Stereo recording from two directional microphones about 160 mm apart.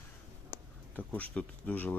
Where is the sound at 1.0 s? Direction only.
10° left (ahead or behind).